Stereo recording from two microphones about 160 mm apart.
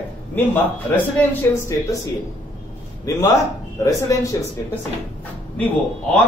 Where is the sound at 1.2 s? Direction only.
10° left (ahead or behind).